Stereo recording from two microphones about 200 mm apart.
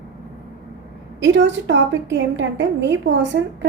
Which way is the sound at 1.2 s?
65° right (ahead or behind).